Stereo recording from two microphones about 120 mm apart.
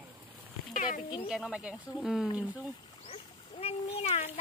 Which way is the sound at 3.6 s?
55° left (ahead or behind).